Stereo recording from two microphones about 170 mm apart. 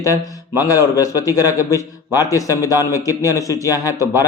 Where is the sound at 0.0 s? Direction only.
20° left (ahead or behind).